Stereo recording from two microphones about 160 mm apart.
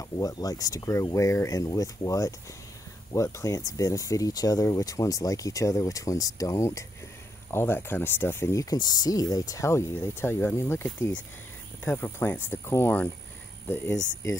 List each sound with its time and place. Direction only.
0.0 s speech: 20° left (ahead or behind)